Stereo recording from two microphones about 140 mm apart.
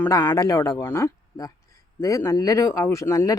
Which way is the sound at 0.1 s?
25° left (ahead or behind).